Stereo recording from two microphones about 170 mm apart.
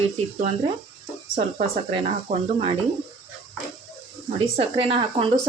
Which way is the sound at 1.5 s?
35° right (ahead or behind).